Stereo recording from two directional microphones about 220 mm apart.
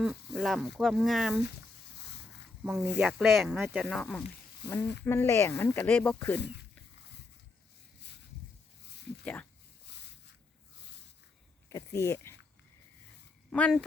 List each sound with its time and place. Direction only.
0.0 s speech: centre (ahead or behind)
2.6 s speech: 5° right (ahead or behind)
6.4 s speech: 50° left (ahead or behind)
9.2 s speech: 5° left (ahead or behind)
9.8 s a sound: 50° left (ahead or behind)
11.7 s speech: 15° left (ahead or behind)
13.5 s speech: 5° left (ahead or behind)